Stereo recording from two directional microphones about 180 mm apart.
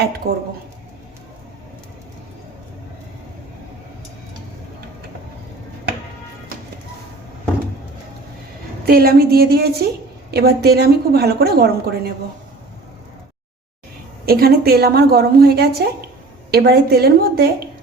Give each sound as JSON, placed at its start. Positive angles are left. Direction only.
{"t": 0.2, "sound": "a woman's voice", "side_deg": -60}
{"t": 8.9, "sound": "a woman's voice", "side_deg": -55}
{"t": 14.3, "sound": "a woman's voice", "side_deg": -55}